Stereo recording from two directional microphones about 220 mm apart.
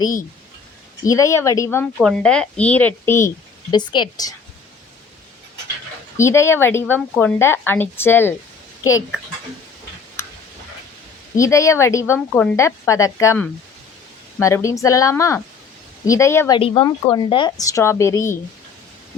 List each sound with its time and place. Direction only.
1.0 s a woman's voice: 15° left (ahead or behind)
6.1 s a woman's voice: 10° left (ahead or behind)
11.3 s a woman's voice: 15° left (ahead or behind)
16.6 s a woman's voice: 25° left (ahead or behind)